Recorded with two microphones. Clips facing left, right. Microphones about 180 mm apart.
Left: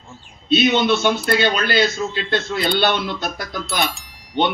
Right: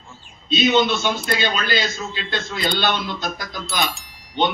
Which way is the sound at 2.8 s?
60° left (ahead or behind).